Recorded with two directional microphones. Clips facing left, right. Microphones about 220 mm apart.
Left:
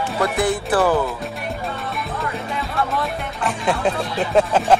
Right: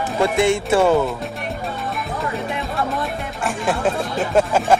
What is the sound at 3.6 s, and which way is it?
Speech, centre (ahead or behind).